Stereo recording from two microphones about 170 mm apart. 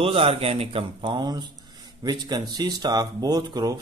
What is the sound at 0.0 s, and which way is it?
A man's voice, 35° right (ahead or behind).